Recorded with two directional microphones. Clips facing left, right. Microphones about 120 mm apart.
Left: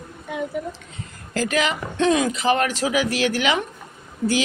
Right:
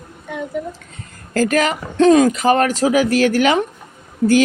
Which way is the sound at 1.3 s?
45° right (ahead or behind).